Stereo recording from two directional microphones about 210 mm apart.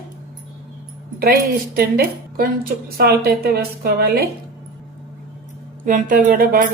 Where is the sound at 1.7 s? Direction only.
45° right (ahead or behind).